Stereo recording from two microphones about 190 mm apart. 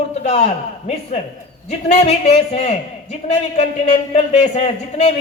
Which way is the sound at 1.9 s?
35° left (ahead or behind).